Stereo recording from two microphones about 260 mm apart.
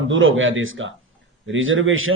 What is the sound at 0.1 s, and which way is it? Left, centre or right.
Speech, right.